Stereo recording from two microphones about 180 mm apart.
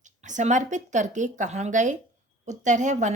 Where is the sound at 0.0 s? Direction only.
45° right (ahead or behind).